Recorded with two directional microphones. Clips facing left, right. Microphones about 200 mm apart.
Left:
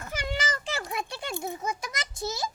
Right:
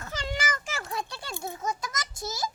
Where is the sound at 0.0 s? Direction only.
10° left (ahead or behind).